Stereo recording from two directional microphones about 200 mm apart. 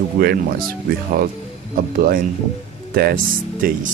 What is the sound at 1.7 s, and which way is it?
Speech, 45° right (ahead or behind).